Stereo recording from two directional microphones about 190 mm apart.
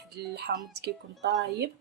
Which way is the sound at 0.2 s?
60° right (ahead or behind).